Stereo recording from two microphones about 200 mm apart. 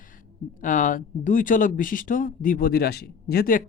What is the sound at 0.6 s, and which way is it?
Speech, 40° left (ahead or behind).